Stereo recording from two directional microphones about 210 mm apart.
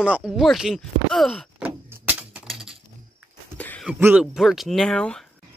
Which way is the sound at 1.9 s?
5° right (ahead or behind).